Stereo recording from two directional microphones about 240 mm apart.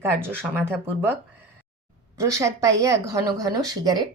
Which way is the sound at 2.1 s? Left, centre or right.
Centre.